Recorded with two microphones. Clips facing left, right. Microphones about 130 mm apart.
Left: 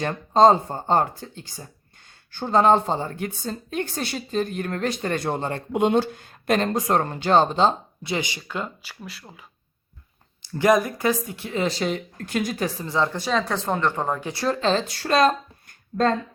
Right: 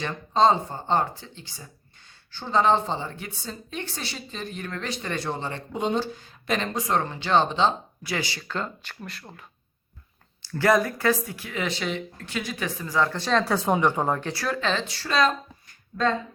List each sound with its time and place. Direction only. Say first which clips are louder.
0.0 s a woman's voice: left 5 dB; 45° left (ahead or behind)
8.0 s speech: left 3 dB; 20° left (ahead or behind); by 9.4 s 5° left (ahead or behind)
10.4 s speech: left 2 dB; 20° left (ahead or behind)
13.3 s speech: right 5 dB; 5° right (ahead or behind)
14.3 s speech: left 5 dB; 30° left (ahead or behind); by 16.1 s 45° left (ahead or behind)